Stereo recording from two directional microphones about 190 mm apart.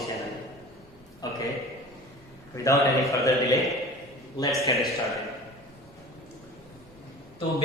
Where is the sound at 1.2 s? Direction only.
20° left (ahead or behind).